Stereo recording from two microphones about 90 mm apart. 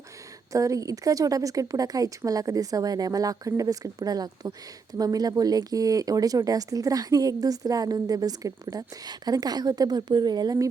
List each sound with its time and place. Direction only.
0.5 s a woman's voice: 40° right (ahead or behind)